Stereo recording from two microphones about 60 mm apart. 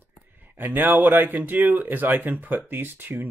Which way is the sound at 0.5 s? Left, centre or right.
Right.